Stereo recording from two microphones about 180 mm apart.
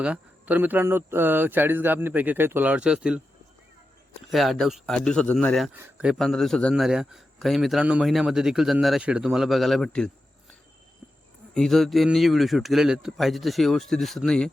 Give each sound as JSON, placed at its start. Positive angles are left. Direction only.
{"t": 0.0, "sound": "speech", "side_deg": -10}
{"t": 4.3, "sound": "a man's voice", "side_deg": 0}
{"t": 5.7, "sound": "a man's voice", "side_deg": -10}
{"t": 11.5, "sound": "a man's voice", "side_deg": 0}